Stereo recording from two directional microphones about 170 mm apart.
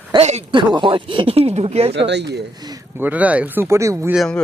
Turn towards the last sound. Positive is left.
turn(degrees=5)  # may be behind; listen again after turning